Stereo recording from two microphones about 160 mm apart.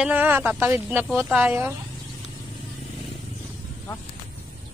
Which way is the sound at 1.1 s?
Centre (ahead or behind).